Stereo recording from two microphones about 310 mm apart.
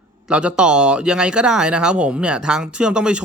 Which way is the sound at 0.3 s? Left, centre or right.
Centre.